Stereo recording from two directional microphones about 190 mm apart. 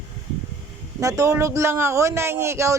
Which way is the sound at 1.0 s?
15° right (ahead or behind).